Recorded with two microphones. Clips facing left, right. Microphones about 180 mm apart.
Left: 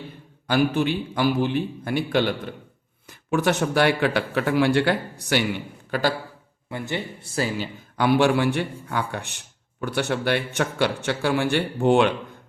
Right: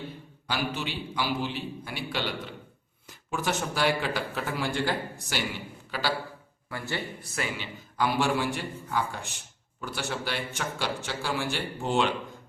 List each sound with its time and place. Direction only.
0.4 s a man's voice: 50° left (ahead or behind)
3.2 s speech: 65° left (ahead or behind)
5.9 s a man's voice: 50° left (ahead or behind)
6.7 s speech: 20° left (ahead or behind)
7.3 s speech: 35° left (ahead or behind)
7.9 s speech: 65° left (ahead or behind)